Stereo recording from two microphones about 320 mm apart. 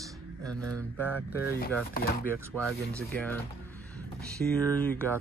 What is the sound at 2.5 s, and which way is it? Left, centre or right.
Speech, centre.